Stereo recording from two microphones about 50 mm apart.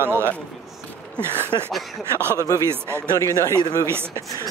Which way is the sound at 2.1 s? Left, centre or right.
Right.